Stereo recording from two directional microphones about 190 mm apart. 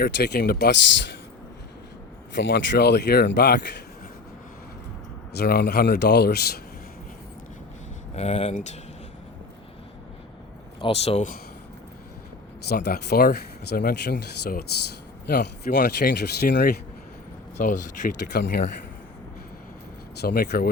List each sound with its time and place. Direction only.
0.0 s speech: 55° left (ahead or behind)
2.3 s speech: 70° left (ahead or behind)
5.4 s speech: 60° left (ahead or behind)
8.1 s speech: 35° left (ahead or behind)
10.8 s speech: 30° left (ahead or behind)
12.6 s speech: 55° left (ahead or behind)
17.6 s speech: 45° left (ahead or behind)
18.3 s speech: 55° left (ahead or behind)
20.2 s speech: 55° left (ahead or behind)